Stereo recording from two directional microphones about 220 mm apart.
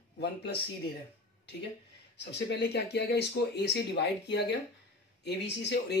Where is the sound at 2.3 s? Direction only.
50° left (ahead or behind).